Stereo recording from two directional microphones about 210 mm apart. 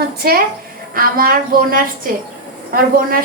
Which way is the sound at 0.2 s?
45° right (ahead or behind).